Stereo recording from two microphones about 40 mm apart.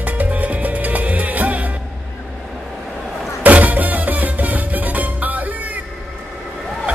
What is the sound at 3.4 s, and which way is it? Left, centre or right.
Music, right.